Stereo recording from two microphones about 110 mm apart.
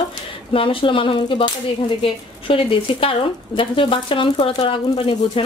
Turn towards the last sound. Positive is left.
turn(degrees=55)  # may be behind; listen again after turning